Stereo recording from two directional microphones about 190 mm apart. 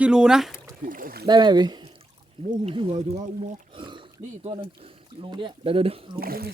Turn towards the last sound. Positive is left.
turn(degrees=-50)  # may be behind; listen again after turning